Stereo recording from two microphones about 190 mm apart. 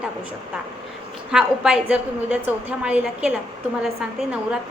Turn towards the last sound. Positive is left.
turn(degrees=-5)  # may be behind; listen again after turning